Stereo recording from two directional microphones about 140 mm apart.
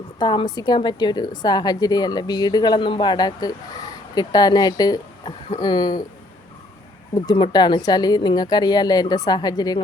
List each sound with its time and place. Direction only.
0.2 s a woman's voice: 30° left (ahead or behind)
7.3 s a woman's voice: 30° left (ahead or behind)